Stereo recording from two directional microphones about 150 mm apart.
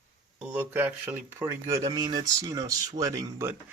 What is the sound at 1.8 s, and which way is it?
Speech, 30° right (ahead or behind).